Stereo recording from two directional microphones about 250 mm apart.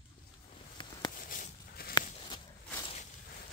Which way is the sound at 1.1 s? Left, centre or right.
Left.